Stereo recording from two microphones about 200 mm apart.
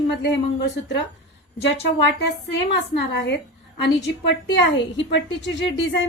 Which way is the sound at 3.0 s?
60° left (ahead or behind).